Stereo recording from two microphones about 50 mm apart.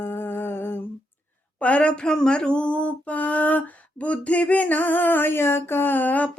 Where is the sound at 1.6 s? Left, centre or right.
Left.